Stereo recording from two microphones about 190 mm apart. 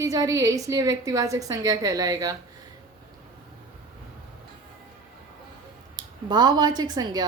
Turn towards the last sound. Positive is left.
turn(degrees=-20)  # may be behind; listen again after turning